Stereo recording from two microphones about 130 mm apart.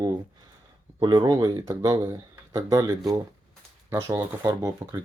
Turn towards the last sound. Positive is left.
turn(degrees=-25)  # may be behind; listen again after turning